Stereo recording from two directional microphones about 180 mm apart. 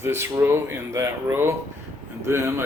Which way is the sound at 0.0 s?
15° right (ahead or behind).